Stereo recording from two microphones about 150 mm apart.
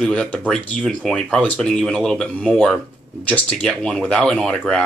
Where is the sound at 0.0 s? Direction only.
5° left (ahead or behind).